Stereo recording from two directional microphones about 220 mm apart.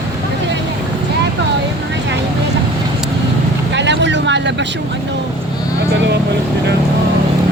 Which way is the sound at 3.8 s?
55° right (ahead or behind).